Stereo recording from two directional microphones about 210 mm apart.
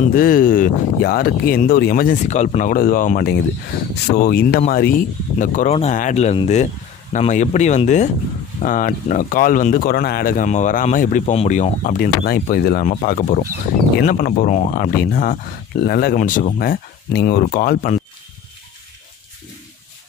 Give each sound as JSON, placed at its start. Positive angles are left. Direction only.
{"t": 0.1, "sound": "speech", "side_deg": 40}